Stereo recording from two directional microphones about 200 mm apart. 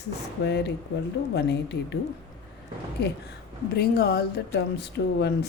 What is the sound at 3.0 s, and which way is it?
Speech, 60° left (ahead or behind).